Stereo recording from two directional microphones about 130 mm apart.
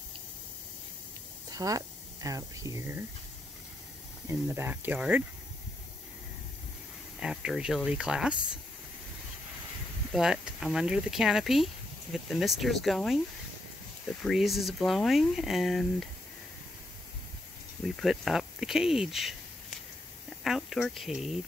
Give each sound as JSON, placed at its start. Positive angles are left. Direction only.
{"t": 1.5, "sound": "speech", "side_deg": -25}
{"t": 4.3, "sound": "speech", "side_deg": -20}
{"t": 7.2, "sound": "speech", "side_deg": -5}
{"t": 10.1, "sound": "speech", "side_deg": -5}
{"t": 14.2, "sound": "speech", "side_deg": 0}
{"t": 17.8, "sound": "speech", "side_deg": 0}
{"t": 20.4, "sound": "speech", "side_deg": 0}